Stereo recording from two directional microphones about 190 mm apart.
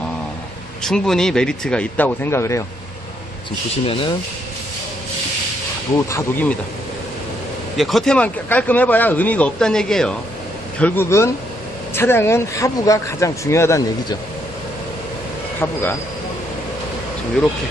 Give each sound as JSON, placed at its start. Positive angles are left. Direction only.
{"t": 0.8, "sound": "speech", "side_deg": 5}
{"t": 3.8, "sound": "speech", "side_deg": 30}
{"t": 6.1, "sound": "speech", "side_deg": 15}
{"t": 7.8, "sound": "speech", "side_deg": 0}
{"t": 15.6, "sound": "speech", "side_deg": 10}